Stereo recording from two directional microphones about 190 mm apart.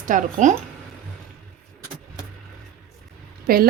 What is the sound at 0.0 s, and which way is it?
Speech, 40° right (ahead or behind).